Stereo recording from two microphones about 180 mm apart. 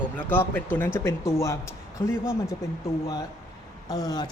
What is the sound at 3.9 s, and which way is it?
Speech, 20° left (ahead or behind).